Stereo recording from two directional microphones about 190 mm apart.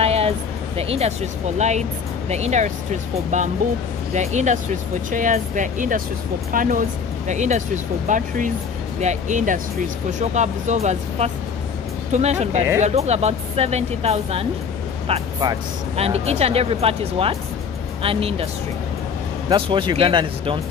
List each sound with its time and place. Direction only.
0.0 s music: 30° right (ahead or behind)
0.7 s speech: 35° right (ahead or behind)
16.0 s speech: 35° right (ahead or behind)
19.5 s speech: 25° right (ahead or behind)